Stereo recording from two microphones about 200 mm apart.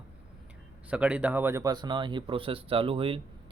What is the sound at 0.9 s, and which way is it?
Speech, 5° right (ahead or behind).